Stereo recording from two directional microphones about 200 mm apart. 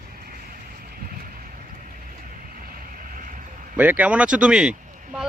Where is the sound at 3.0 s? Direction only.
45° right (ahead or behind).